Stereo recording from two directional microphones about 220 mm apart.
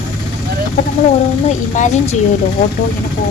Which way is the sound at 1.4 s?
35° left (ahead or behind).